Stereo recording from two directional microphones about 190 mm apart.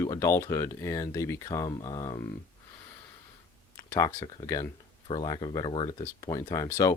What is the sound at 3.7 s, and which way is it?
Speech, 15° left (ahead or behind).